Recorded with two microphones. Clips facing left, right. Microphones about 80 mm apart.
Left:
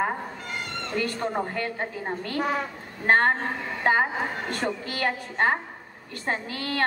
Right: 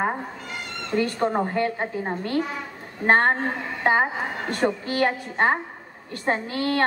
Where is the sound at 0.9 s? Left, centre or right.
Right.